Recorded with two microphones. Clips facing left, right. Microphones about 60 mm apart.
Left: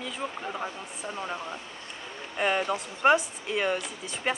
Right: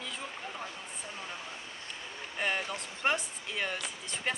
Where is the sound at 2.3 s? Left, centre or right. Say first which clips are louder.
Left 7 dB; centre.